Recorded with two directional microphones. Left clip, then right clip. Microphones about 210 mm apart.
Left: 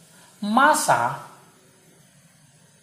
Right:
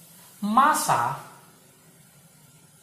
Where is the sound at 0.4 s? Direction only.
45° left (ahead or behind).